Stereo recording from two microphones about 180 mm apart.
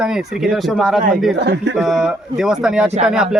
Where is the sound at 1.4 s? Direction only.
75° right (ahead or behind).